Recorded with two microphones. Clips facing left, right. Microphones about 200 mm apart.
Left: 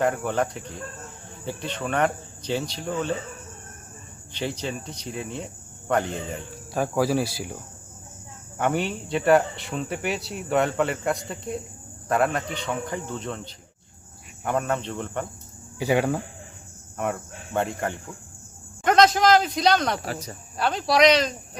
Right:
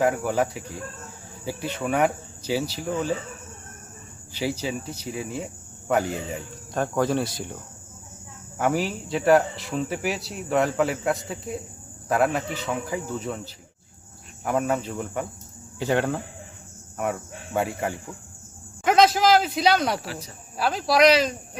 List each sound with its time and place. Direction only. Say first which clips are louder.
0.0 s speech: right 1 dB; 5° right (ahead or behind)
4.3 s speech: right 2 dB; 5° right (ahead or behind)
6.7 s speech: left 1 dB; 5° left (ahead or behind)
8.5 s speech: right 1 dB; centre (ahead or behind)
15.8 s speech: left 1 dB; 10° left (ahead or behind)
17.0 s speech: even; 5° right (ahead or behind)
20.1 s speech: left 3 dB; 45° left (ahead or behind)
20.6 s speech: even; centre (ahead or behind)